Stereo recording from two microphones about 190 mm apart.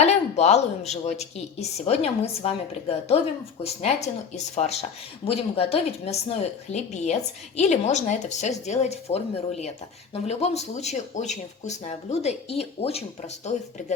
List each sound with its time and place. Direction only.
0.0 s a woman's voice: 35° left (ahead or behind)
3.6 s a woman's voice: 35° left (ahead or behind)